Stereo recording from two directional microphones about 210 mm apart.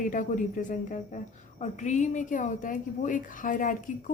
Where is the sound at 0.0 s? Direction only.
40° left (ahead or behind).